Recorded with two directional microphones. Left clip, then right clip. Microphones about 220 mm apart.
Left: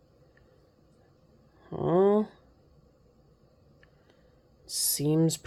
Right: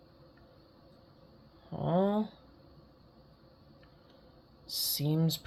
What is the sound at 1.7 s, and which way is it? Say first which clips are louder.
Speech: left 7 dB; 50° left (ahead or behind).